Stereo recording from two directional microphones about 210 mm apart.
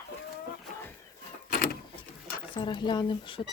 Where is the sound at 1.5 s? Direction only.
40° left (ahead or behind).